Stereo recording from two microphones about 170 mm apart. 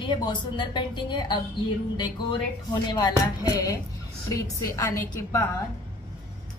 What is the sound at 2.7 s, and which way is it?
A woman's voice, 25° left (ahead or behind).